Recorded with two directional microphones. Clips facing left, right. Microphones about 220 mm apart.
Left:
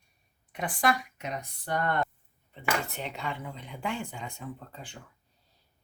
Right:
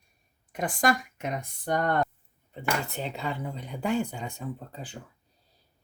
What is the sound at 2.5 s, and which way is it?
Speech, 35° right (ahead or behind).